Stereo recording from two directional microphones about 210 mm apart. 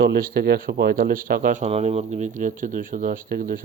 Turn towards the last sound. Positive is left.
turn(degrees=-40)  # may be behind; listen again after turning